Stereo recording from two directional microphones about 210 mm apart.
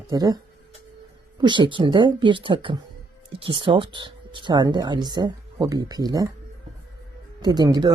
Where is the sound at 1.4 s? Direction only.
20° right (ahead or behind).